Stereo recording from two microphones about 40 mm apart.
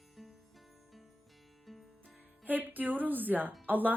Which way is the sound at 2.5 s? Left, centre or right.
Right.